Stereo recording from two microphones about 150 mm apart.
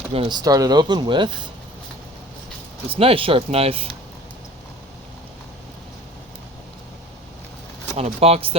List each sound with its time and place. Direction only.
0.1 s speech: 40° right (ahead or behind)
0.3 s speech: 25° right (ahead or behind)
2.9 s speech: 40° right (ahead or behind)
7.9 s speech: 45° right (ahead or behind)